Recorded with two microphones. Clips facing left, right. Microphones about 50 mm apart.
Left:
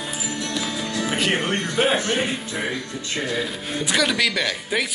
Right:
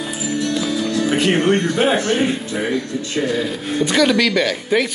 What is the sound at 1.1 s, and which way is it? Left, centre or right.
Speech, centre.